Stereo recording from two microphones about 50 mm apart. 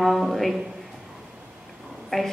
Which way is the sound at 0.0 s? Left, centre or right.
Centre.